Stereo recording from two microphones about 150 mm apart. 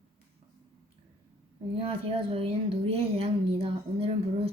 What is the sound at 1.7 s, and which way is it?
A woman's voice, 40° right (ahead or behind).